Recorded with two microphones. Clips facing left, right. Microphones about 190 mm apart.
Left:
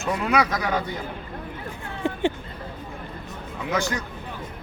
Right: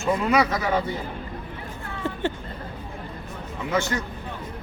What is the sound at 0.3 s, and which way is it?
Speech, 5° right (ahead or behind).